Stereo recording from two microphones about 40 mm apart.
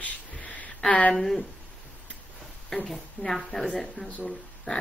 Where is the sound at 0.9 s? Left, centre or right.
Left.